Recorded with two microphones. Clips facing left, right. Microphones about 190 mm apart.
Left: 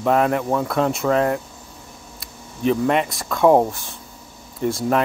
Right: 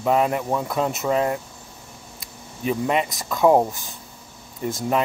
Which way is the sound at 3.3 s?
Centre (ahead or behind).